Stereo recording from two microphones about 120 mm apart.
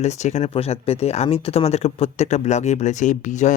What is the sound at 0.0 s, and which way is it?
Speech, 70° left (ahead or behind).